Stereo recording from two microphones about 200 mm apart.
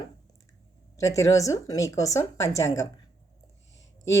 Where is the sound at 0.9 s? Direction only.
15° left (ahead or behind).